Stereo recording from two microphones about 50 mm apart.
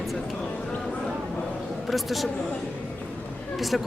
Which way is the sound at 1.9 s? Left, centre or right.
Centre.